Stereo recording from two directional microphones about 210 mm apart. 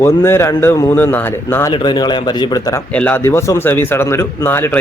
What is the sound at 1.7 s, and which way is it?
A man's voice, 20° left (ahead or behind).